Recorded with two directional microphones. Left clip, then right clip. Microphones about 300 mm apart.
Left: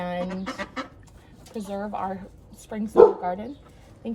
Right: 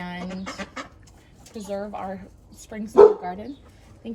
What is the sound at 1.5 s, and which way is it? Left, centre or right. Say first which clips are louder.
Speech: even; centre.